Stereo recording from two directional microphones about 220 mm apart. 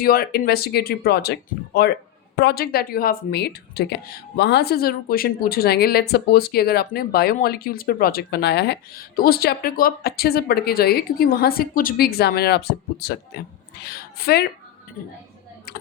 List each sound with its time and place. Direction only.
0.0 s a woman's voice: 45° left (ahead or behind)
15.7 s tick-tock: 45° left (ahead or behind)